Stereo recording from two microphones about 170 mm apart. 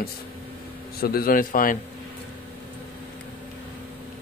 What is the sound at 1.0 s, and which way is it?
Speech, 60° left (ahead or behind).